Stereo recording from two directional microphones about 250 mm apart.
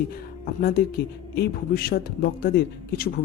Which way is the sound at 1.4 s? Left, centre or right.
Left.